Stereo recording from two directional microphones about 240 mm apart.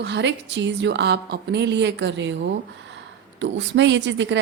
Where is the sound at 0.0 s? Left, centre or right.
Right.